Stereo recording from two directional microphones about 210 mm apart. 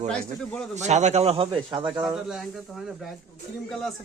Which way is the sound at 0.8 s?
35° right (ahead or behind).